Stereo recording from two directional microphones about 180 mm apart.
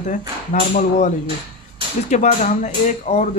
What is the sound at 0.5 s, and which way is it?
Speech, 45° left (ahead or behind).